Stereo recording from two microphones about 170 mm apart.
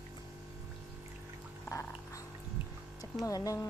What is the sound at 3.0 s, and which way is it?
Speech, 20° left (ahead or behind).